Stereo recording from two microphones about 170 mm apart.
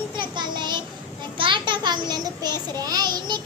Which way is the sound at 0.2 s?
25° right (ahead or behind).